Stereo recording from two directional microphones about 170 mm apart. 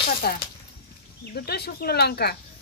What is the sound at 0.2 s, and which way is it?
Speech, 60° left (ahead or behind).